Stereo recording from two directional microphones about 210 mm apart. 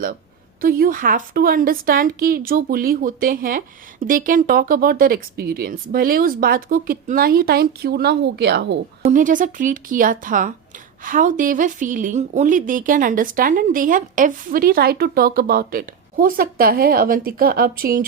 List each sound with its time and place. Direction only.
0.6 s speech: 45° right (ahead or behind)
9.0 s a woman's voice: 40° right (ahead or behind)